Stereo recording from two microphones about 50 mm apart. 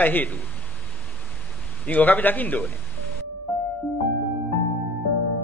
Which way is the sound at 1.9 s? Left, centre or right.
Left.